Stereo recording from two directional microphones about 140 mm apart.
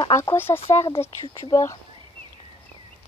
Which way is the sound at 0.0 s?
20° left (ahead or behind).